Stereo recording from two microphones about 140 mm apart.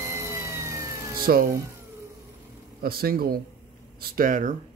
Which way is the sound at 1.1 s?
90° right.